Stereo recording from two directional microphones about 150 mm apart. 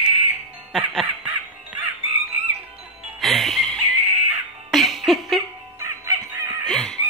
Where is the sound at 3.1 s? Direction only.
Centre (ahead or behind).